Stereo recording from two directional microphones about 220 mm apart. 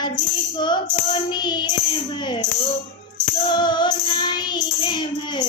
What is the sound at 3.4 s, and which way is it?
Music, 20° left (ahead or behind).